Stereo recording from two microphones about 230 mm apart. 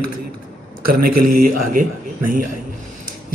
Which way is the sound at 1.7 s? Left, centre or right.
Right.